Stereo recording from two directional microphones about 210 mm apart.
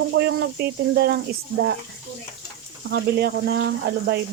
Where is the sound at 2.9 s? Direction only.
50° right (ahead or behind).